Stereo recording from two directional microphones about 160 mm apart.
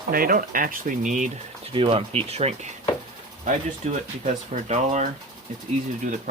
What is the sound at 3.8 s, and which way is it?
Speech, 50° right (ahead or behind).